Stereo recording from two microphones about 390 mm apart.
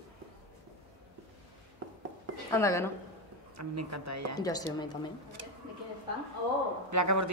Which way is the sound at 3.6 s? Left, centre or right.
Right.